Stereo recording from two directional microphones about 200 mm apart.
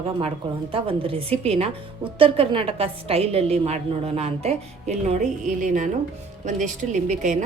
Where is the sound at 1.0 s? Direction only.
30° right (ahead or behind).